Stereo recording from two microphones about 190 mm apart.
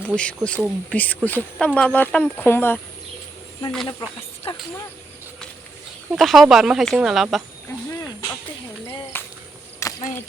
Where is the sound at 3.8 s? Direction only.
30° left (ahead or behind).